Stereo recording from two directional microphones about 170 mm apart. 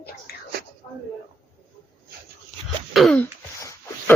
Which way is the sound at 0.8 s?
15° left (ahead or behind).